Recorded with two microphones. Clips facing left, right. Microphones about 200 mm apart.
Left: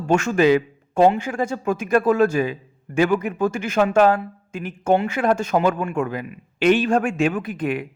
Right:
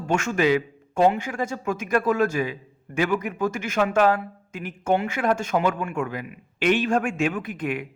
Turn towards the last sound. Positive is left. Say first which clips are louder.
# left 4 dB
turn(degrees=35)  # may be behind; listen again after turning